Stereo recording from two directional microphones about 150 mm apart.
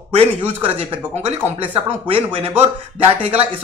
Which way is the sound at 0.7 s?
40° right (ahead or behind).